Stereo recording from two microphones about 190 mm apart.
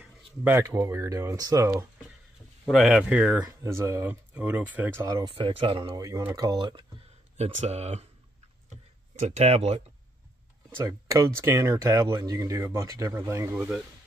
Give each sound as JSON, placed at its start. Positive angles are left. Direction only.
{"t": 0.0, "sound": "speech", "side_deg": -10}
{"t": 2.6, "sound": "speech", "side_deg": 0}
{"t": 5.3, "sound": "speech", "side_deg": -30}
{"t": 9.2, "sound": "speech", "side_deg": -35}
{"t": 10.9, "sound": "speech", "side_deg": -15}